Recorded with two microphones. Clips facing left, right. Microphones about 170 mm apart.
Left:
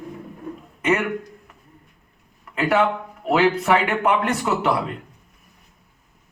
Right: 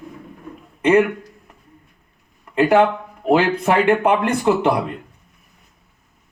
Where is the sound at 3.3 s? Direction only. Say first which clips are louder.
Right 2 dB; 30° right (ahead or behind).